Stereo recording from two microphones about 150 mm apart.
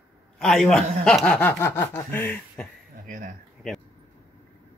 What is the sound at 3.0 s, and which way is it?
Speech, 60° right (ahead or behind).